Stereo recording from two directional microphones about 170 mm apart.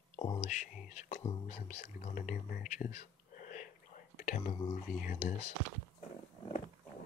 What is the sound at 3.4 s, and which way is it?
Whispering, 50° left (ahead or behind).